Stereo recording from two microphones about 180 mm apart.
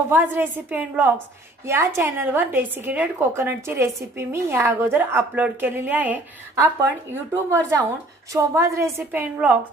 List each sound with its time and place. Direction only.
0.1 s a woman's voice: 10° right (ahead or behind)